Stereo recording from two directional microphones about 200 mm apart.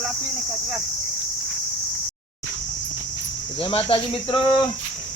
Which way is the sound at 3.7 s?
25° left (ahead or behind).